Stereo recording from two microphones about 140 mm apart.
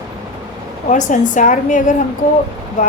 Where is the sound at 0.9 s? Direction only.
60° left (ahead or behind).